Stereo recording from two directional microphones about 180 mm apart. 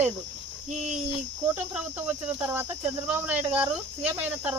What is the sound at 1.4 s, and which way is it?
Speech, 10° right (ahead or behind).